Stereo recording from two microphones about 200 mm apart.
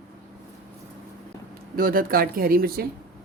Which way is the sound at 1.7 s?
45° right (ahead or behind).